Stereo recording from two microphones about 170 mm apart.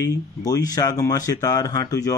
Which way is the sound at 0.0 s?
20° left (ahead or behind).